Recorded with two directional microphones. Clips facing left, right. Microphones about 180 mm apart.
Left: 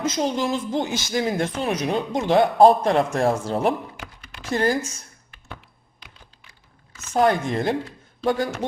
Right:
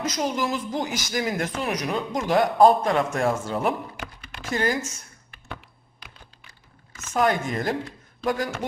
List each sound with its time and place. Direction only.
0.0 s speech: 25° left (ahead or behind)
3.9 s computer keyboard: 65° right (ahead or behind)
4.5 s speech: 35° left (ahead or behind)
7.1 s speech: 30° left (ahead or behind)